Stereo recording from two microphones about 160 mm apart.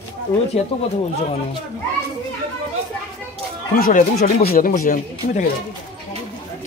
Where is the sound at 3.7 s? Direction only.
70° left (ahead or behind).